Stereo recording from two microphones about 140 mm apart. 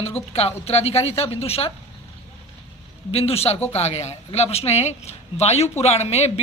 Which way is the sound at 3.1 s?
45° left (ahead or behind).